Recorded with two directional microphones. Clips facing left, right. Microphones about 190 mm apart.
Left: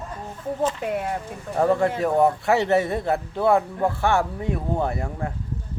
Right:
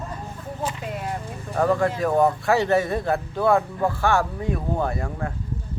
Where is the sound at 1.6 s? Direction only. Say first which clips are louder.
Left 1 dB; 25° left (ahead or behind).